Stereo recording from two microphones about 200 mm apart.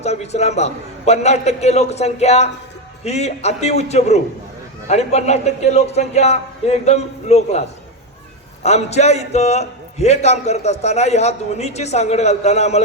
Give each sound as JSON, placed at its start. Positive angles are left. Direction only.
{"t": 0.0, "sound": "a man's voice", "side_deg": 35}
{"t": 8.6, "sound": "a man's voice", "side_deg": 35}